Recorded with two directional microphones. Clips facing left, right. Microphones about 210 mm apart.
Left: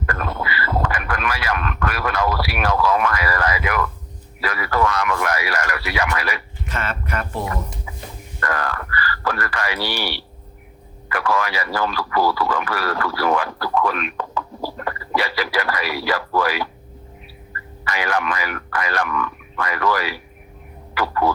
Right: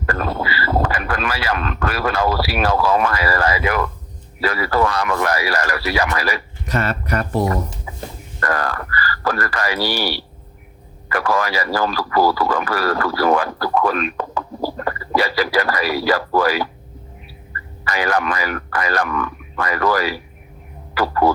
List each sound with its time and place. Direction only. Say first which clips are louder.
0.0 s speech: right 4 dB; 30° right (ahead or behind)
17.8 s speech: right 3 dB; 40° right (ahead or behind)